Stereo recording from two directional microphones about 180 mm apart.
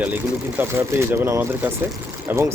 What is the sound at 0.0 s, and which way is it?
Speech, 10° right (ahead or behind).